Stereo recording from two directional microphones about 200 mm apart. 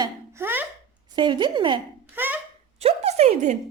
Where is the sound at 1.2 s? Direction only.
25° right (ahead or behind).